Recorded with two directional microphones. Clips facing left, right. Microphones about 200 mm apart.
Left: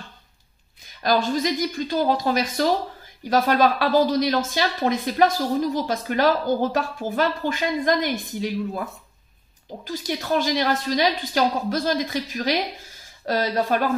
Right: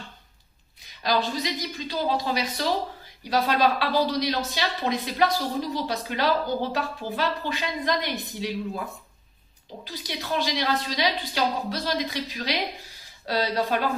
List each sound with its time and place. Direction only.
1.0 s speech: 50° left (ahead or behind)
9.8 s speech: 50° left (ahead or behind)